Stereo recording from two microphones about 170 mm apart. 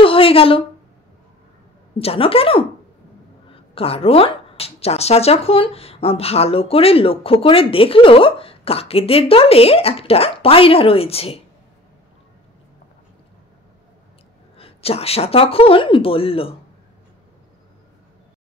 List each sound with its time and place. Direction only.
0.0 s speech: 30° left (ahead or behind)
2.0 s speech: 35° left (ahead or behind)
3.7 s speech: 35° left (ahead or behind)
14.6 s speech: 35° left (ahead or behind)